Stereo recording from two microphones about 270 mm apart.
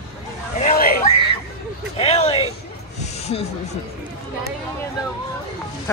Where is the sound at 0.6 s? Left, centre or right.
Left.